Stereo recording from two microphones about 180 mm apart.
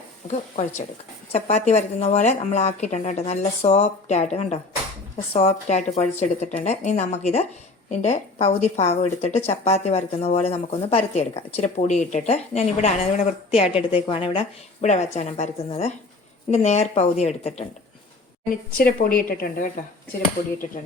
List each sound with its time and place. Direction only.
1.3 s speech: 35° left (ahead or behind)
18.8 s a woman's voice: 55° left (ahead or behind)